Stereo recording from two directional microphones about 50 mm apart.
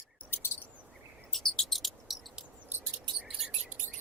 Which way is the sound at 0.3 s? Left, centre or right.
Left.